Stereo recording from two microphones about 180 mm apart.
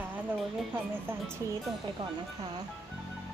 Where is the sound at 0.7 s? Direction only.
10° right (ahead or behind).